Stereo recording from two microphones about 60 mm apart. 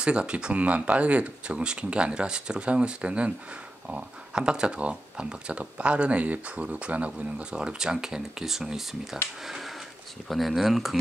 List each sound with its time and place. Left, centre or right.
0.0 s speech: centre
10.2 s speech: centre